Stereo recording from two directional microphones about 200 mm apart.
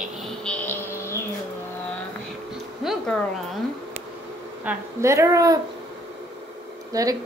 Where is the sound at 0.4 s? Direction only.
5° left (ahead or behind).